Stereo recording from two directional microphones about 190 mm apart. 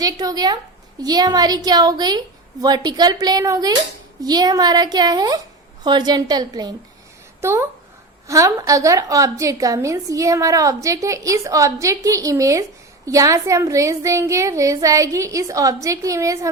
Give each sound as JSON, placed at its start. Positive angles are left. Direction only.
{"t": 0.0, "sound": "a woman's voice", "side_deg": -20}